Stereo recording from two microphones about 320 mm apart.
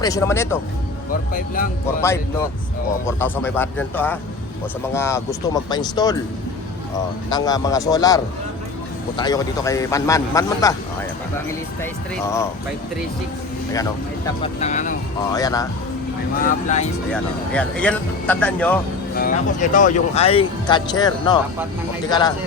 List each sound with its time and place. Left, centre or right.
0.0 s speech: centre
1.3 s speech: left
2.0 s speech: centre
7.3 s speech: centre
14.4 s speech: left
15.3 s speech: centre
16.4 s speech: left
17.1 s speech: centre
19.1 s speech: left